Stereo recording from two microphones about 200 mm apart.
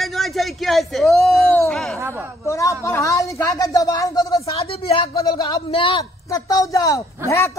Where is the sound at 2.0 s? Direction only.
10° right (ahead or behind).